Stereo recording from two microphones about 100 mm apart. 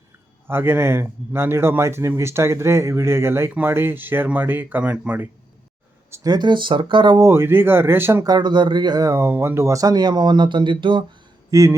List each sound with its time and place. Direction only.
0.4 s speech: 20° right (ahead or behind)
6.2 s speech: 45° right (ahead or behind)
7.2 s speech: 25° right (ahead or behind)
8.2 s speech: 45° right (ahead or behind)
9.1 s speech: 25° right (ahead or behind); by 11.0 s 55° right (ahead or behind)
11.5 s mantra: 30° right (ahead or behind)